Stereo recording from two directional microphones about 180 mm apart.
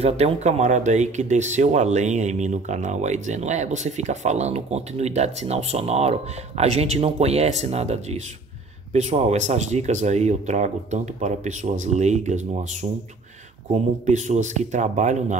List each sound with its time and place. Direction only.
0.0 s speech: 35° right (ahead or behind)
14.0 s speech: 40° right (ahead or behind)